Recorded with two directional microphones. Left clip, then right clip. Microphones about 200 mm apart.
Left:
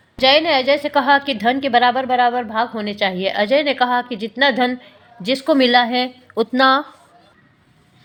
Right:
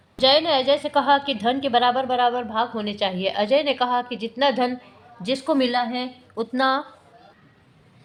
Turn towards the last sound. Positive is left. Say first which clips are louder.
# left 7 dB
turn(degrees=20)  # may be behind; listen again after turning